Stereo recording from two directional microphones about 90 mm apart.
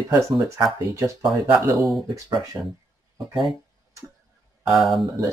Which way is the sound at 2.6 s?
25° right (ahead or behind).